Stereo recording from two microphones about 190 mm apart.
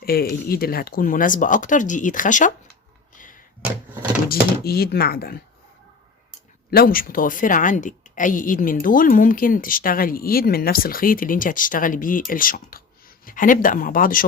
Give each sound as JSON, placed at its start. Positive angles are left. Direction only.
{"t": 0.0, "sound": "a woman's voice", "side_deg": 55}
{"t": 4.3, "sound": "a woman's voice", "side_deg": 55}
{"t": 6.7, "sound": "a woman's voice", "side_deg": 50}